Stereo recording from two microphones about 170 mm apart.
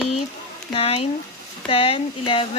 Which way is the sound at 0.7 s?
35° left (ahead or behind).